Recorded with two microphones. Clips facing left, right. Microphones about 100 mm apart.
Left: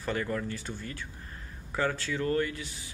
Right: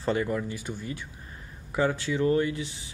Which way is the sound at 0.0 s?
20° right (ahead or behind).